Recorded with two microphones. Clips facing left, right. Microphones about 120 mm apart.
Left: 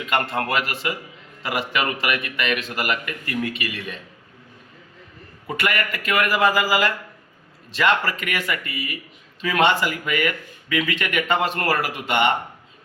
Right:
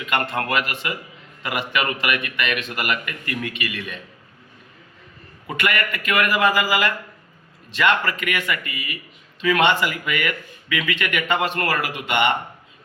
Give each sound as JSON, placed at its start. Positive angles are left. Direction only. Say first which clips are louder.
{"t": 0.0, "sound": "a man's voice", "louder": "left 1 dB", "side_deg": 35}
{"t": 5.5, "sound": "a man's voice", "louder": "right 1 dB", "side_deg": 35}
{"t": 8.1, "sound": "a man's voice", "louder": "right 1 dB", "side_deg": 35}